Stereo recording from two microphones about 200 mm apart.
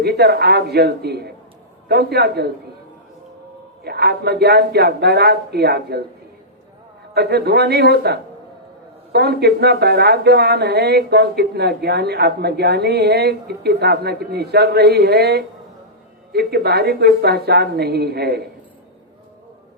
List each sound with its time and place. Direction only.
0.0 s speech: 55° right (ahead or behind)
3.8 s speech: 55° right (ahead or behind)
7.1 s speech: 55° right (ahead or behind)